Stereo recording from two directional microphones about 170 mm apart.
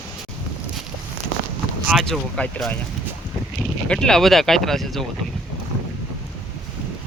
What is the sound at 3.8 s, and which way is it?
Speech, 5° left (ahead or behind).